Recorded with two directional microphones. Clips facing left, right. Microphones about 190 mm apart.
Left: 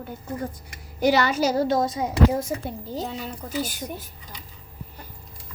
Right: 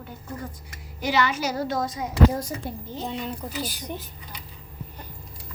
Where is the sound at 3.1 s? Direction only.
5° left (ahead or behind).